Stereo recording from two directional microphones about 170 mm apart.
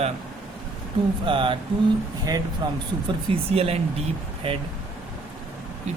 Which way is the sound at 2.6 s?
30° right (ahead or behind).